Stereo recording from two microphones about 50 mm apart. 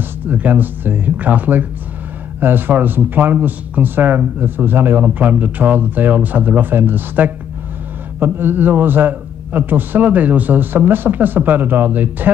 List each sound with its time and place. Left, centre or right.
0.0 s speech: right